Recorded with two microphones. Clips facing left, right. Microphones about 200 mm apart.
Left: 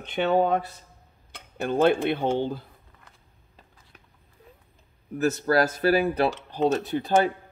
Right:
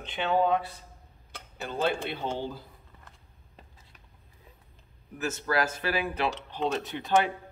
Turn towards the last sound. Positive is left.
turn(degrees=40)  # may be behind; listen again after turning